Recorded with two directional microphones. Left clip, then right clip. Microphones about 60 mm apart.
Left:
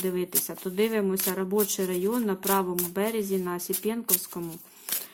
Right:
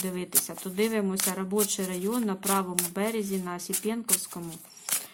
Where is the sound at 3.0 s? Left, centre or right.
Left.